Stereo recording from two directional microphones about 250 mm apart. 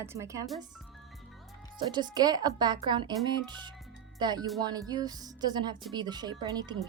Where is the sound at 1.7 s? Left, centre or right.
Centre.